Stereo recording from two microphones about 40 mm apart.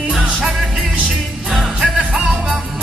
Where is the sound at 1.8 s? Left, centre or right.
Right.